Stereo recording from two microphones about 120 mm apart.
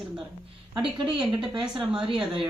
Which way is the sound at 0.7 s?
45° right (ahead or behind).